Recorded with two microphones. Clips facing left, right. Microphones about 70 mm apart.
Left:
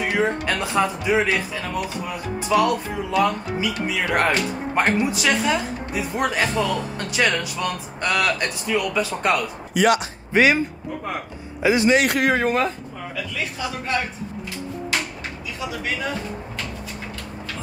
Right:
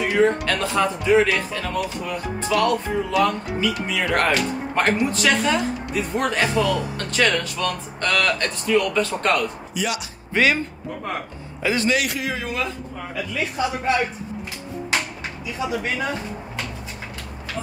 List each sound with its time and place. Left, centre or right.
0.0 s speech: centre
9.8 s a man's voice: left
10.3 s speech: centre
11.6 s speech: centre
12.1 s a man's voice: left
13.1 s a man's voice: centre
15.8 s speech: right